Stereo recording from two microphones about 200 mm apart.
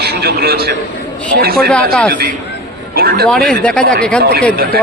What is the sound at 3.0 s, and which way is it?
Speech, 50° right (ahead or behind).